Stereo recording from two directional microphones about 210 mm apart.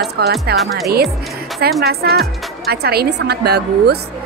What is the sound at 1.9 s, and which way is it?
Speech, 50° right (ahead or behind).